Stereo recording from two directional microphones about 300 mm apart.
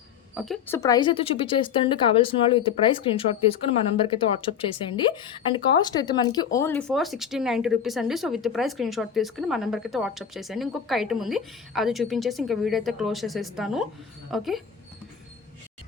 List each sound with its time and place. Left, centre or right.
0.3 s speech: centre